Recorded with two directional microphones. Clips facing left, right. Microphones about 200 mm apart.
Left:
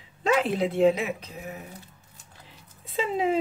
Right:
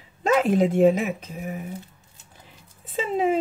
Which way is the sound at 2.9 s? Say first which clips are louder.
Right 3 dB; 50° right (ahead or behind).